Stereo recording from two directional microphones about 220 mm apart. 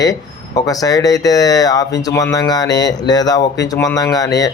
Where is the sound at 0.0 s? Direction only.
15° left (ahead or behind).